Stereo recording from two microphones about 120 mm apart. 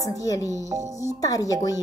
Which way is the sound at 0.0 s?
30° left (ahead or behind).